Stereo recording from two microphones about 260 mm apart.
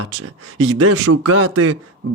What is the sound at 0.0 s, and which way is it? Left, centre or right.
Speech, right.